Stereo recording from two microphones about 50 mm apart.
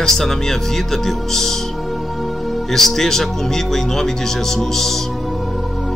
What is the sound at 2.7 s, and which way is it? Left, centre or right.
Speech, centre.